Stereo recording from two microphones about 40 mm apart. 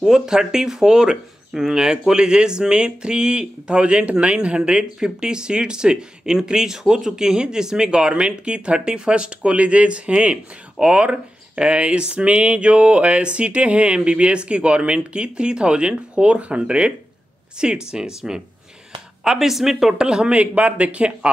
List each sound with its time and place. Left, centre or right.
0.0 s speech: centre
20.0 s speech: right
20.3 s speech: right